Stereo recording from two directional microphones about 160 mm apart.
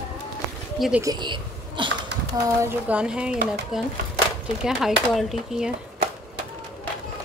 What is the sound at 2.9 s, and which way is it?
A child's voice, 5° right (ahead or behind).